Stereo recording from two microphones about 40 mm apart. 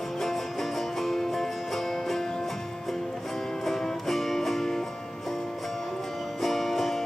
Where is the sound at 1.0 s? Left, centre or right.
Centre.